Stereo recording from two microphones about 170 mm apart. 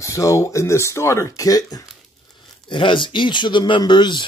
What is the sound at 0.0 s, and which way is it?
Speech, 20° left (ahead or behind).